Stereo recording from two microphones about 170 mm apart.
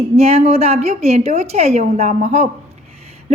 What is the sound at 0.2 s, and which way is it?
A woman's voice, 40° right (ahead or behind).